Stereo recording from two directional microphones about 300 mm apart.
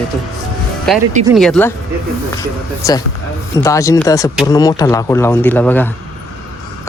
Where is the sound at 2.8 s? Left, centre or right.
Centre.